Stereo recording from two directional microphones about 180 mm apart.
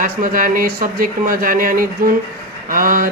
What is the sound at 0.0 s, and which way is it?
A woman's voice, 50° right (ahead or behind).